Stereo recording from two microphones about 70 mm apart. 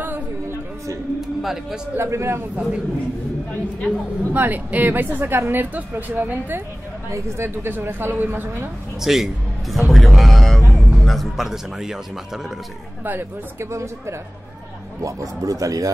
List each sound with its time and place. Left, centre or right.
0.0 s a sound: right
1.4 s a man's voice: centre
2.0 s a woman's voice: right
2.5 s a man's voice: centre
3.9 s speech: centre
4.3 s speech: right
7.1 s a woman's voice: right
9.0 s a man's voice: centre
13.0 s a woman's voice: right
15.0 s speech: right